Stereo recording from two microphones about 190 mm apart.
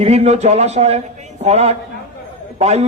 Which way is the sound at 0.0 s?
35° right (ahead or behind).